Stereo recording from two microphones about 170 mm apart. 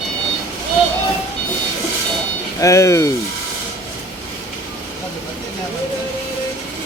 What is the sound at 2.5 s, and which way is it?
Speech, 20° left (ahead or behind).